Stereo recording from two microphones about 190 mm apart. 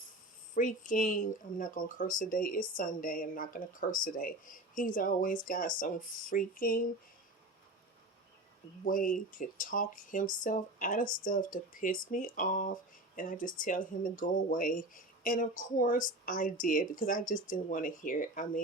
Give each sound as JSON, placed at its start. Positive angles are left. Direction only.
{"t": 0.5, "sound": "speech", "side_deg": 45}
{"t": 8.8, "sound": "speech", "side_deg": 45}